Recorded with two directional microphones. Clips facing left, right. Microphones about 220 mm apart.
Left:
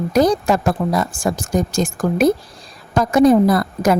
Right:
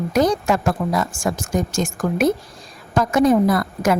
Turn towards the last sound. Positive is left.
turn(degrees=35)  # may be behind; listen again after turning